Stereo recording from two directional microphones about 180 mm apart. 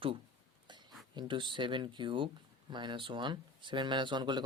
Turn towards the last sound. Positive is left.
turn(degrees=-25)  # may be behind; listen again after turning